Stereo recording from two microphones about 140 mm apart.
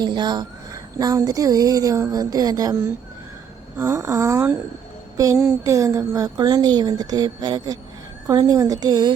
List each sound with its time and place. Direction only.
0.0 s speech: 30° right (ahead or behind)